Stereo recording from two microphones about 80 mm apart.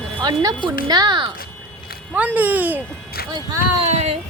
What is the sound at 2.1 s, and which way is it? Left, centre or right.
Speech, right.